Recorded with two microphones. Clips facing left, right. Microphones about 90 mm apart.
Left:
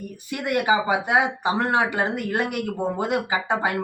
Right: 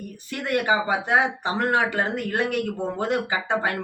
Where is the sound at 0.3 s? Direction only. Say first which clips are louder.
Left 1 dB; 15° left (ahead or behind).